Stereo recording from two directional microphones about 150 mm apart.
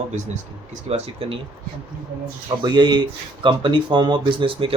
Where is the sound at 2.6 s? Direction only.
30° right (ahead or behind).